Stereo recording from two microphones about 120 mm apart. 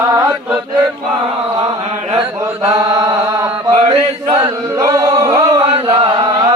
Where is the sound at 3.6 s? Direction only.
55° right (ahead or behind).